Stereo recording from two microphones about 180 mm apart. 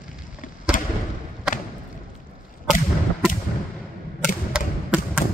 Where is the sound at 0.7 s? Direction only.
50° left (ahead or behind).